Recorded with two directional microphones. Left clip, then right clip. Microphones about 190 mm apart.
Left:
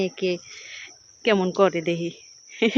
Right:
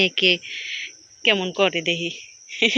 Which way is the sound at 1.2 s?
25° left (ahead or behind).